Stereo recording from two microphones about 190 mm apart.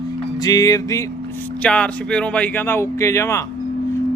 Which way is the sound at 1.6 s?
5° left (ahead or behind).